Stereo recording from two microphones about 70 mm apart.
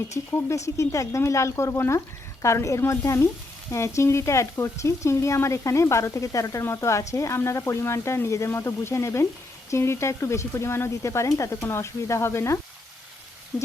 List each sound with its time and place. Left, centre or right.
0.3 s speech: left
11.6 s speech: left